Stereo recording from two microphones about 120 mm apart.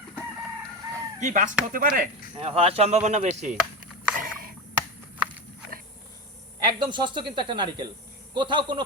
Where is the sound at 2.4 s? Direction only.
55° right (ahead or behind); by 3.5 s 75° right (ahead or behind).